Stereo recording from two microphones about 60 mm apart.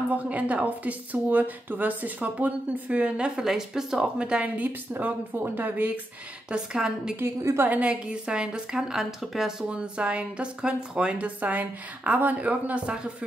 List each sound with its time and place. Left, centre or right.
0.1 s speech: right
4.9 s speech: right
6.5 s speech: centre
7.6 s speech: right
7.9 s speech: centre
9.7 s speech: centre